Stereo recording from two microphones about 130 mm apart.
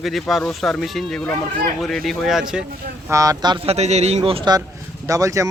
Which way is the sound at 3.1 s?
25° right (ahead or behind).